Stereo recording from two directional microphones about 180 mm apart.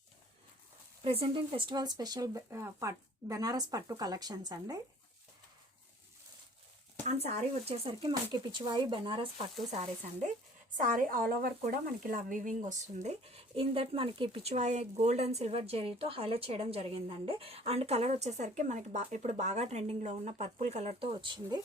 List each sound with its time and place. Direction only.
1.0 s speech: 30° right (ahead or behind)
7.0 s speech: 40° right (ahead or behind)
10.8 s speech: 45° right (ahead or behind); by 21.6 s 25° right (ahead or behind)